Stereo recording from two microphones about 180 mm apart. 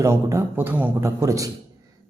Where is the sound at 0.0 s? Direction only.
15° right (ahead or behind).